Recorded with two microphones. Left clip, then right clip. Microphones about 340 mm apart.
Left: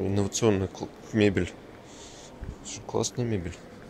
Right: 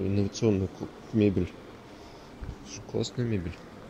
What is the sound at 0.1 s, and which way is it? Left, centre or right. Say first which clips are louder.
Speech: left 3 dB; left.